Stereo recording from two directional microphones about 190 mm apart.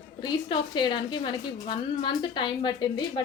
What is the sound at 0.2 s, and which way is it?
A woman's voice, 25° left (ahead or behind).